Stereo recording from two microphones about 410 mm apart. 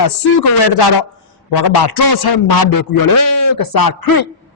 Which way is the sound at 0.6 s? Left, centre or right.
Left.